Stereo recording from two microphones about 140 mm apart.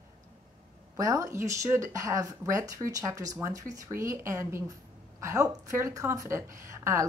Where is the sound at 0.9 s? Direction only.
25° right (ahead or behind).